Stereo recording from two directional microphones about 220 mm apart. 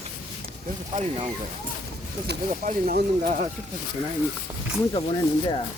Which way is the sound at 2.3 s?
45° right (ahead or behind).